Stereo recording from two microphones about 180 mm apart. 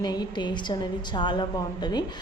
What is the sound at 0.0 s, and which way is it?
A woman's voice, 20° left (ahead or behind).